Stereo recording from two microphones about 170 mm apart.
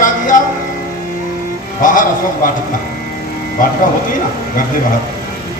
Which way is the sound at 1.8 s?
50° left (ahead or behind).